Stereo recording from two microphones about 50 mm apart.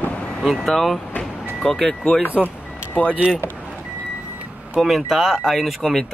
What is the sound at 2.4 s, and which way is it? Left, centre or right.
Vehicle, left.